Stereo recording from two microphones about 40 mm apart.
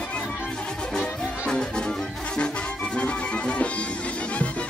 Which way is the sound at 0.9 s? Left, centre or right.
Centre.